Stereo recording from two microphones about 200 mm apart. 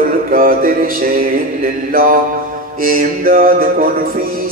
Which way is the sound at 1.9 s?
45° right (ahead or behind).